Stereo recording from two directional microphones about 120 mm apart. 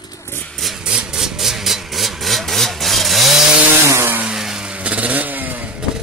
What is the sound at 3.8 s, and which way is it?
Chainsaw, 20° right (ahead or behind).